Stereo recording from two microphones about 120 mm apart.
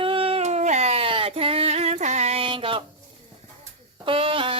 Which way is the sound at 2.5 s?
45° right (ahead or behind).